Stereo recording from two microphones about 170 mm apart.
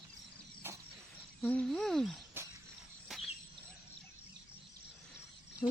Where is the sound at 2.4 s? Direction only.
15° right (ahead or behind).